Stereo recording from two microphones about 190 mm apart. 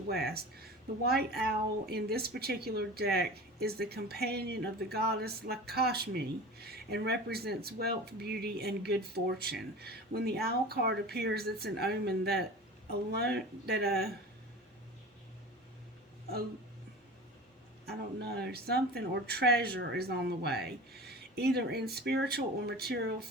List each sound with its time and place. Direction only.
0.1 s speech: 55° right (ahead or behind)
17.8 s speech: 55° right (ahead or behind)